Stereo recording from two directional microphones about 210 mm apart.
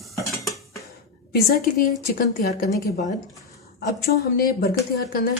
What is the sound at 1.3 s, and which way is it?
A woman's voice, 45° left (ahead or behind).